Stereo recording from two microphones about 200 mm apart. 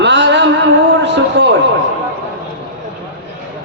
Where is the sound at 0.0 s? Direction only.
60° right (ahead or behind).